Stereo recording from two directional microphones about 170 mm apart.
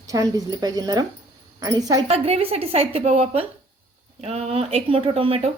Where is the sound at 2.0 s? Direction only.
35° right (ahead or behind).